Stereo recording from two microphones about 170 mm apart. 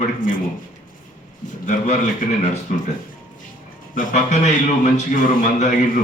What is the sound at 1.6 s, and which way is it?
Speech, 45° left (ahead or behind).